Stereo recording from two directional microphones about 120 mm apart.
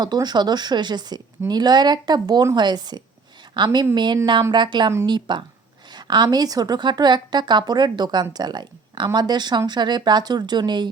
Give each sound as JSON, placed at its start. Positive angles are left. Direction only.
{"t": 0.0, "sound": "a woman's voice", "side_deg": -35}